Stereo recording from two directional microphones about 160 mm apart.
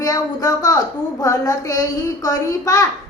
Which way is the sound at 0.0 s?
20° left (ahead or behind).